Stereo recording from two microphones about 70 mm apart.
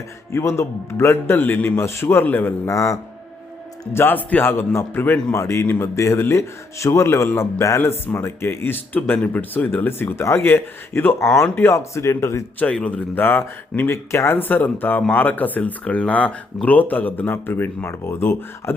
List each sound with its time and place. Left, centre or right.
0.3 s speech: left
2.6 s a man's voice: left
3.9 s speech: left
12.7 s speech: centre
13.9 s speech: left
14.4 s speech: left